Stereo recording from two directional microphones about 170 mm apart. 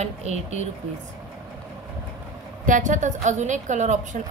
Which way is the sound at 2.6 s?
50° right (ahead or behind).